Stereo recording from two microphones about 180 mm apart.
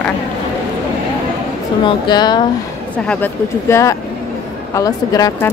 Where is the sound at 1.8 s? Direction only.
25° left (ahead or behind).